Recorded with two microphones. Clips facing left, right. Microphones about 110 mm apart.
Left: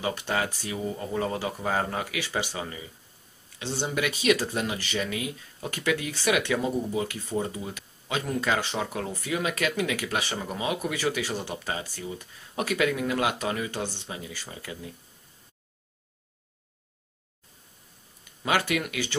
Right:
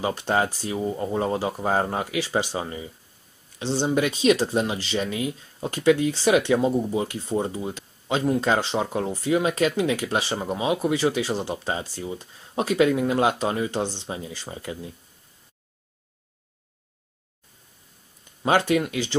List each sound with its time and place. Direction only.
0.4 s speech: 30° right (ahead or behind)
7.4 s speech: 30° right (ahead or behind)
18.7 s speech: 25° right (ahead or behind)